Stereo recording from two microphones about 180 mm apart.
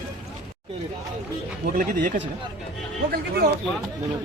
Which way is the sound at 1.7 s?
50° right (ahead or behind).